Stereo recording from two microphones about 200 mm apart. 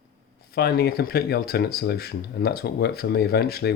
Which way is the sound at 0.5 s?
50° left (ahead or behind).